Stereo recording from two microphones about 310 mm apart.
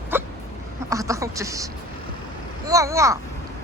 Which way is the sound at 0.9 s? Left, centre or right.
Centre.